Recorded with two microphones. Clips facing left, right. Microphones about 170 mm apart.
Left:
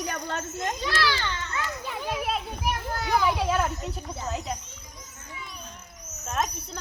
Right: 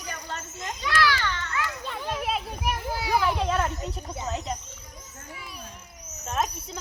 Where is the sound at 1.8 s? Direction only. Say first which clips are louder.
Even; 10° left (ahead or behind); by 3.3 s 5° right (ahead or behind).